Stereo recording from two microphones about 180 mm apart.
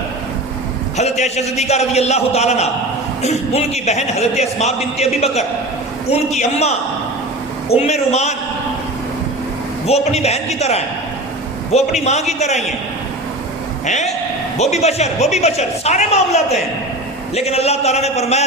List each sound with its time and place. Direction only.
0.9 s a man's voice: 40° left (ahead or behind)
7.8 s a man's voice: 40° left (ahead or behind)
9.8 s a man's voice: 35° left (ahead or behind)
13.8 s a man's voice: 40° left (ahead or behind)